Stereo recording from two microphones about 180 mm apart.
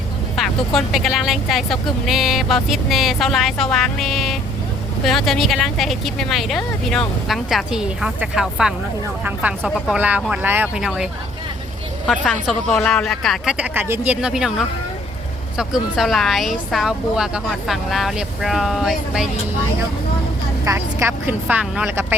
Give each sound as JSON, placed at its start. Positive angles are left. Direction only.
{"t": 0.3, "sound": "speech", "side_deg": 0}
{"t": 15.5, "sound": "speech", "side_deg": 0}
{"t": 20.7, "sound": "speech", "side_deg": -15}